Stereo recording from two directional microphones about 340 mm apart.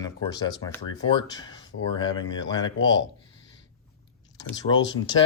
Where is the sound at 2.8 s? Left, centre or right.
Left.